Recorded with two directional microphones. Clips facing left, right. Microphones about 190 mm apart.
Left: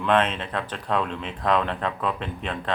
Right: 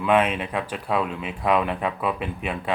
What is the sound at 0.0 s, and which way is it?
Speech, 10° right (ahead or behind).